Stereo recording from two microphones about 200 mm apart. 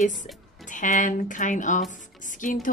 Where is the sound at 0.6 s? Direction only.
40° left (ahead or behind).